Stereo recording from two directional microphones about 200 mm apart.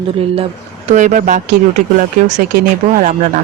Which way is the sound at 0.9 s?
40° right (ahead or behind).